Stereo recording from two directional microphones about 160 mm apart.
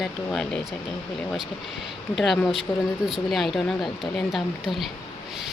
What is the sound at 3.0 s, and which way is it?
Speech, centre (ahead or behind).